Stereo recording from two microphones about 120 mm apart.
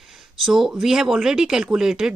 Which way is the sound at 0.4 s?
5° right (ahead or behind).